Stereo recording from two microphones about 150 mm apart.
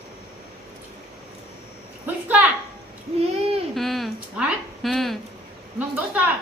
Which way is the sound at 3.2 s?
40° right (ahead or behind).